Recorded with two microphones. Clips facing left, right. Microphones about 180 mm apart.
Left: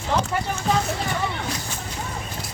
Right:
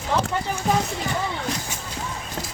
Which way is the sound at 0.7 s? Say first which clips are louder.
Even; 15° right (ahead or behind).